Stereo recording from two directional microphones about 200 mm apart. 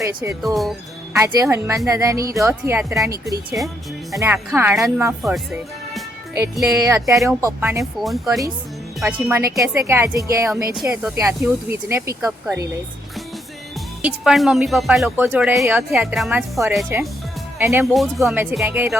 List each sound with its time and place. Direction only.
0.0 s speech: 15° right (ahead or behind)
0.4 s speech: centre (ahead or behind)
1.1 s speech: 15° right (ahead or behind)
5.2 s speech: centre (ahead or behind)
6.3 s speech: 15° right (ahead or behind)
7.8 s speech: centre (ahead or behind)
14.0 s speech: centre (ahead or behind)
17.8 s speech: centre (ahead or behind)